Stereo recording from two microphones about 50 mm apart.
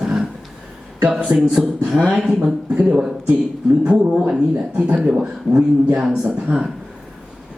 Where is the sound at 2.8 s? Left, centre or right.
Right.